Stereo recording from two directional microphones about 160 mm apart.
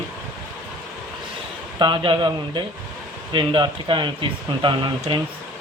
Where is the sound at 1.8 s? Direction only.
30° right (ahead or behind).